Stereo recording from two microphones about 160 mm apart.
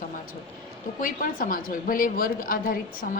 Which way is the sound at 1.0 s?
60° left (ahead or behind).